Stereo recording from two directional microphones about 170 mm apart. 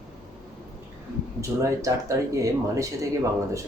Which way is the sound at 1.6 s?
20° right (ahead or behind).